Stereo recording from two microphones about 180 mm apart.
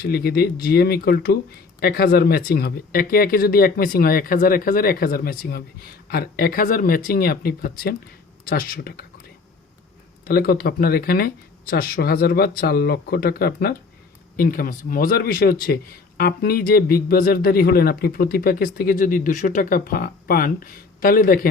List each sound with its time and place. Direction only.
0.0 s speech: 60° left (ahead or behind)
10.2 s speech: 55° left (ahead or behind)